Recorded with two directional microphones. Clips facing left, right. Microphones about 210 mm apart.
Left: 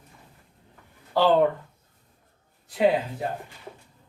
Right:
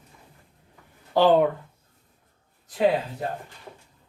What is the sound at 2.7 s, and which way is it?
Speech, 5° left (ahead or behind).